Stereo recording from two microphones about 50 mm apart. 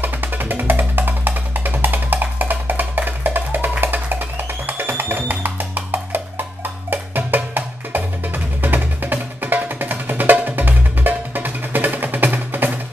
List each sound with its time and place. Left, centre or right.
0.0 s music: right